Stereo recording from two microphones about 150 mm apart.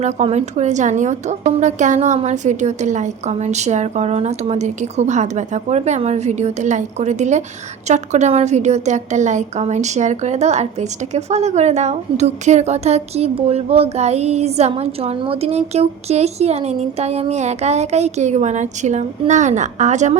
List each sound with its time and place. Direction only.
0.0 s a woman's voice: 45° right (ahead or behind)